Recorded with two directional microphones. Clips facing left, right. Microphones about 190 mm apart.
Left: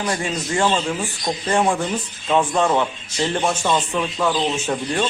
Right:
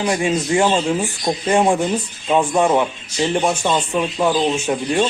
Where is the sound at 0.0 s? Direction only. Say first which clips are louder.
Right 5 dB; 20° right (ahead or behind).